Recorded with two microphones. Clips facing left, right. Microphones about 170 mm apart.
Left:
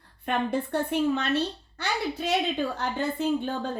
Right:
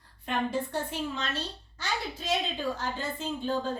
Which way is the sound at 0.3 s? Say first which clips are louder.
Left 3 dB; 60° left (ahead or behind).